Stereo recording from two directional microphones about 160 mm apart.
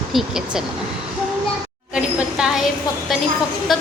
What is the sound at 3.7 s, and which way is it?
Speech, centre (ahead or behind).